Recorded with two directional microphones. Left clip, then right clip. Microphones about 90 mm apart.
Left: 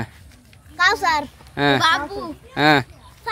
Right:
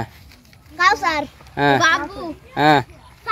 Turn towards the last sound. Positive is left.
turn(degrees=25)  # may be behind; listen again after turning